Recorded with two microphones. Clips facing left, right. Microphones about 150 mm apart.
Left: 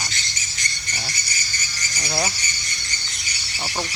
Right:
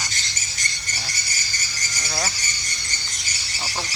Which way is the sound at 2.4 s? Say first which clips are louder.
Even; 45° right (ahead or behind).